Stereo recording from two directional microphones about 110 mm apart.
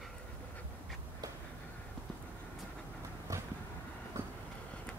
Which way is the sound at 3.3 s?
30° right (ahead or behind).